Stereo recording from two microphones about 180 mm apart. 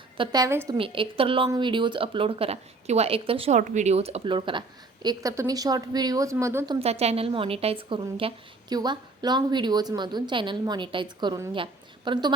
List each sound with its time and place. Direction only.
0.2 s a woman's voice: 20° right (ahead or behind)
0.8 s a woman's voice: 30° right (ahead or behind); by 6.7 s 15° right (ahead or behind)
6.7 s a woman's voice: 35° right (ahead or behind)